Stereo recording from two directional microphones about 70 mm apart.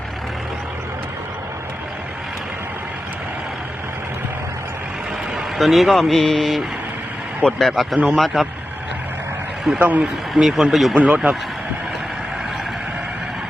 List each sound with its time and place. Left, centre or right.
5.5 s speech: centre
7.6 s speech: centre
9.7 s speech: right
10.3 s speech: centre
10.9 s speech: centre